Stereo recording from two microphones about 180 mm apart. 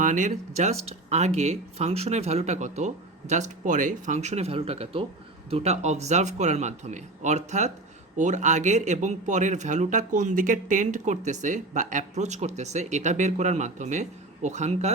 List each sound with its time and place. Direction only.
0.0 s speech: 45° right (ahead or behind)